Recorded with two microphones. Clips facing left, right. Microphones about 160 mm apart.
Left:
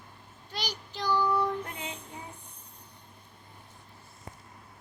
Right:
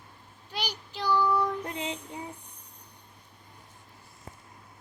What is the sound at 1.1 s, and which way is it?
Child singing, 15° left (ahead or behind).